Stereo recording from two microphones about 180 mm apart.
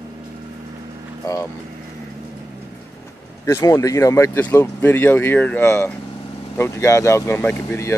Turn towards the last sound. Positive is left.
turn(degrees=15)  # may be behind; listen again after turning